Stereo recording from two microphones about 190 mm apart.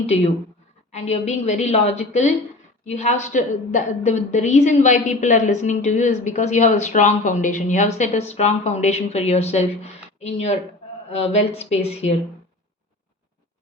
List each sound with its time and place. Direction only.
0.9 s a woman's voice: 35° left (ahead or behind)